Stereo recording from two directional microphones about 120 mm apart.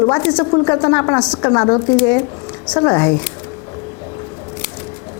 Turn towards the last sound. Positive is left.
turn(degrees=20)  # may be behind; listen again after turning